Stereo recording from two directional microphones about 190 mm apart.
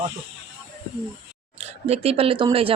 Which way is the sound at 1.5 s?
30° right (ahead or behind).